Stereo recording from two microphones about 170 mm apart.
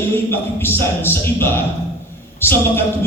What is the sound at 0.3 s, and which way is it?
A man's voice, 15° left (ahead or behind).